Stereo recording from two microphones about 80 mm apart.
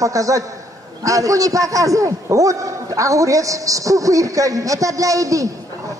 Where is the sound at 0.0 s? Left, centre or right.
Right.